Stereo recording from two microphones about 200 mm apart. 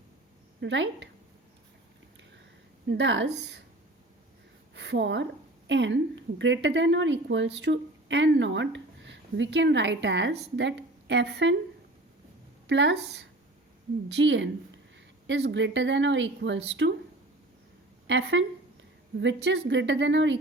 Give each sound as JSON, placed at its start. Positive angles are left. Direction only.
{"t": 0.6, "sound": "speech", "side_deg": -65}
{"t": 2.8, "sound": "speech", "side_deg": -65}
{"t": 4.7, "sound": "a woman's voice", "side_deg": -60}
{"t": 12.6, "sound": "speech", "side_deg": -60}
{"t": 18.1, "sound": "speech", "side_deg": -65}